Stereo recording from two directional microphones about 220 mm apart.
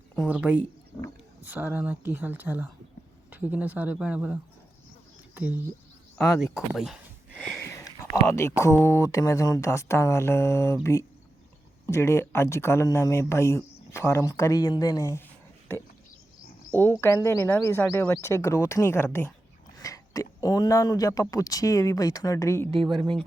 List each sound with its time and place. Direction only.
0.2 s speech: 5° right (ahead or behind)
7.7 s speech: 15° left (ahead or behind)
11.9 s speech: 10° left (ahead or behind)
16.7 s speech: 10° left (ahead or behind)